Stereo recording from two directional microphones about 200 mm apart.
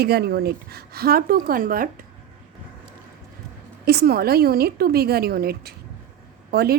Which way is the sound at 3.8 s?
50° right (ahead or behind).